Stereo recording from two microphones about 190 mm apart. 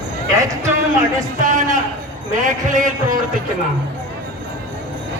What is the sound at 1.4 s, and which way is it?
A man's voice, 40° right (ahead or behind).